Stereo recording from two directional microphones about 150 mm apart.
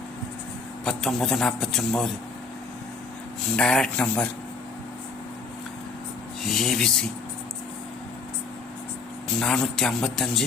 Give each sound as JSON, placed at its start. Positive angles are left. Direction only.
{"t": 0.9, "sound": "a man's voice", "side_deg": 0}
{"t": 3.5, "sound": "a man's voice", "side_deg": 5}
{"t": 6.4, "sound": "a man's voice", "side_deg": 0}
{"t": 9.4, "sound": "a man's voice", "side_deg": 5}